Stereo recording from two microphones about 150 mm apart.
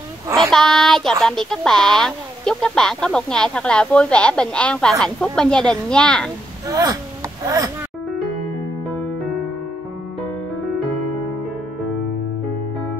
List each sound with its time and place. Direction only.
0.4 s a sound: 5° left (ahead or behind)
1.2 s speech: 5° left (ahead or behind)
6.7 s speech: 25° right (ahead or behind)